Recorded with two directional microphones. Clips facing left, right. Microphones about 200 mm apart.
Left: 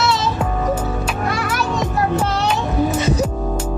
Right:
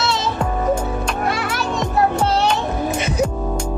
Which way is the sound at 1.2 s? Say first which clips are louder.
Left 1 dB; 25° right (ahead or behind).